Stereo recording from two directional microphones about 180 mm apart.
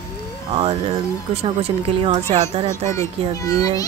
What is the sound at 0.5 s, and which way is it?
A woman's voice, 30° right (ahead or behind).